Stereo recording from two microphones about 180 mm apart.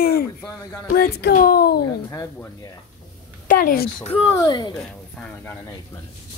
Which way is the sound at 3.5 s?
55° left (ahead or behind).